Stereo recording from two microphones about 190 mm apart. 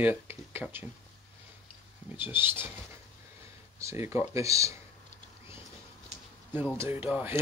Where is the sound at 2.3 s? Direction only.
10° right (ahead or behind).